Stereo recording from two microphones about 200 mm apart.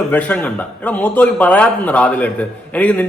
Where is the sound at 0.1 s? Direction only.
10° left (ahead or behind).